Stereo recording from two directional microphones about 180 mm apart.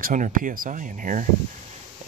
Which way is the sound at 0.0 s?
50° right (ahead or behind).